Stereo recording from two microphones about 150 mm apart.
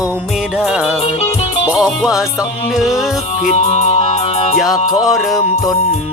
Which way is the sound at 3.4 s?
50° left (ahead or behind).